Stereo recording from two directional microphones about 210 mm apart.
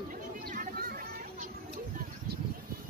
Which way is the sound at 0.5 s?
45° right (ahead or behind).